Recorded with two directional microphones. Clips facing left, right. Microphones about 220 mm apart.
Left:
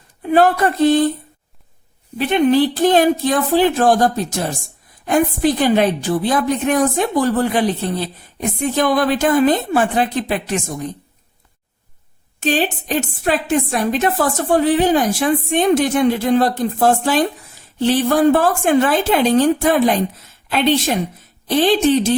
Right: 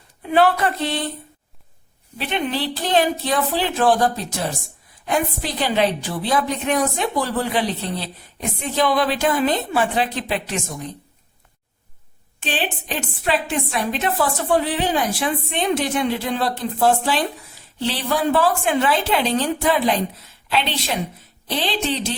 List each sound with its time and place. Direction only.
0.2 s a woman's voice: 45° left (ahead or behind)
2.1 s a woman's voice: 45° left (ahead or behind)
12.4 s a woman's voice: 40° left (ahead or behind)